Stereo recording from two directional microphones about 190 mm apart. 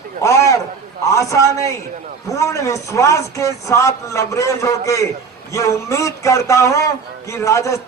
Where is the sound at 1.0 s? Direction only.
15° left (ahead or behind).